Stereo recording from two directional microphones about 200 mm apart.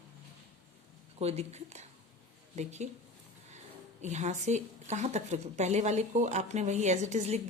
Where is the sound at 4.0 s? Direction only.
35° right (ahead or behind).